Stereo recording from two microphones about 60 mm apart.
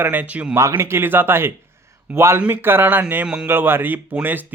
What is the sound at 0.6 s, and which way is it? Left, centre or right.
Speech, right.